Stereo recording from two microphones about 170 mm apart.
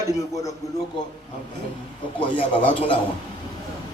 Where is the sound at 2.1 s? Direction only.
30° left (ahead or behind).